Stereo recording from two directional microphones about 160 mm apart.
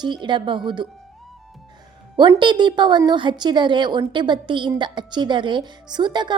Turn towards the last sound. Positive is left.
turn(degrees=-30)  # may be behind; listen again after turning